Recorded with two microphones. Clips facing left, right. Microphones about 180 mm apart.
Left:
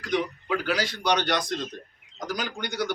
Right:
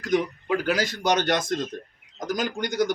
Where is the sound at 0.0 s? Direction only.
45° right (ahead or behind).